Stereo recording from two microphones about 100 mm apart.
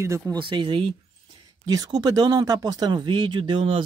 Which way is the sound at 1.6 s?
40° right (ahead or behind).